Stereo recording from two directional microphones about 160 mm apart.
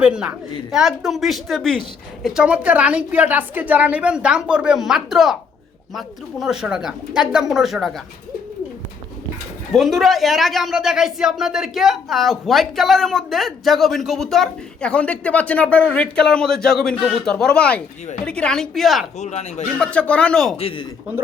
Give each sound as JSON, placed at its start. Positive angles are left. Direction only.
{"t": 0.0, "sound": "a woman's voice", "side_deg": -5}
{"t": 9.7, "sound": "speech", "side_deg": 0}
{"t": 19.2, "sound": "speech", "side_deg": 45}
{"t": 19.6, "sound": "speech", "side_deg": 5}
{"t": 20.6, "sound": "a man's voice", "side_deg": 35}